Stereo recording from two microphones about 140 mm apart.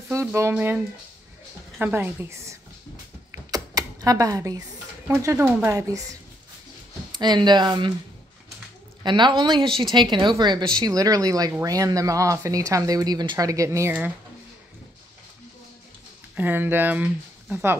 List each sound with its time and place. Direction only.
0.1 s speech: 20° right (ahead or behind)
1.8 s a woman's voice: 15° right (ahead or behind)
3.5 s typewriter: 25° right (ahead or behind)
5.0 s speech: 20° right (ahead or behind)
9.0 s speech: 35° right (ahead or behind); by 14.1 s 15° right (ahead or behind)
16.3 s speech: 15° right (ahead or behind)